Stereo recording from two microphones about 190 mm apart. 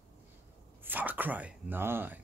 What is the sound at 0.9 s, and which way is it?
Speech, 10° right (ahead or behind).